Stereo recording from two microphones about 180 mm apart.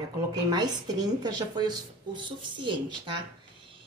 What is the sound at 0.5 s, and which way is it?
A woman's voice, 25° right (ahead or behind).